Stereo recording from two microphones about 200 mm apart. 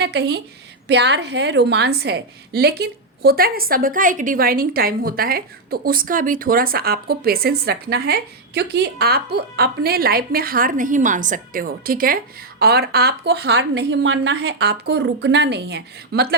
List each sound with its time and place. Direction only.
0.0 s a woman's voice: 55° right (ahead or behind)